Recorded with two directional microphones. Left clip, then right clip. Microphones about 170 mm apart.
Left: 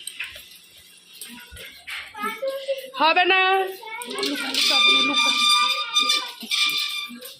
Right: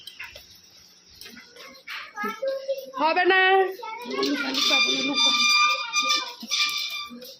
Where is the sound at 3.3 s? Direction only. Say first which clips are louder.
Even; 25° right (ahead or behind).